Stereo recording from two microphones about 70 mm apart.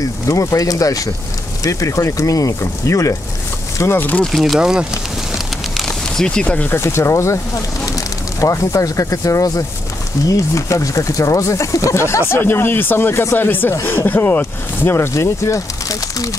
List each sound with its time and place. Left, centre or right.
0.3 s speech: left
4.2 s speech: centre
4.6 s speech: centre
5.8 s a sound: centre
6.4 s speech: left
6.7 s speech: left
7.8 s speech: left
12.4 s speech: left
14.8 s speech: left